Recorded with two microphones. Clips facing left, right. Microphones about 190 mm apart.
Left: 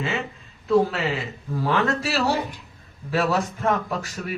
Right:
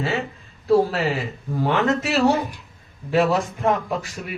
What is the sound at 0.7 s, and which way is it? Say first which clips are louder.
Speech: right 2 dB; 30° right (ahead or behind).